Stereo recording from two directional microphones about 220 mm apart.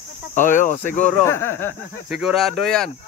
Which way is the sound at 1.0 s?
5° left (ahead or behind).